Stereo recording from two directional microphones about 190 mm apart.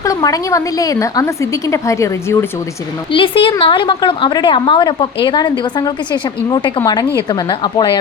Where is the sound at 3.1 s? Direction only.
25° left (ahead or behind).